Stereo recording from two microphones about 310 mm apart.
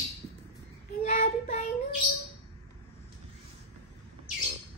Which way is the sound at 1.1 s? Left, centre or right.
Left.